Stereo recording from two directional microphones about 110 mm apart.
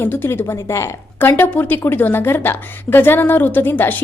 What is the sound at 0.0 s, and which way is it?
A woman's voice, 20° left (ahead or behind).